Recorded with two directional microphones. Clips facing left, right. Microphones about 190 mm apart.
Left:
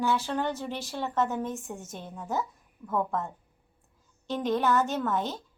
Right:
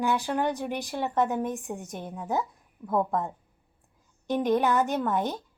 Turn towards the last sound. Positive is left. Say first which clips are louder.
# right 2 dB
turn(degrees=-15)  # may be behind; listen again after turning